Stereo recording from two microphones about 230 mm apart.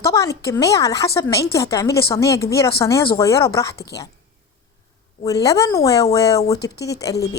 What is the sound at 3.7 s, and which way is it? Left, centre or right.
Speech, left.